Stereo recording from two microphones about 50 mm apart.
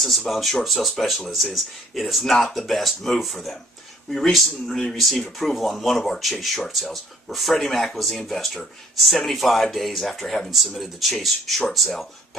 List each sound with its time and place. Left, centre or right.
0.0 s speech: centre